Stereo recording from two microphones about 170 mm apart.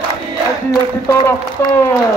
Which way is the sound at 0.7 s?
15° left (ahead or behind).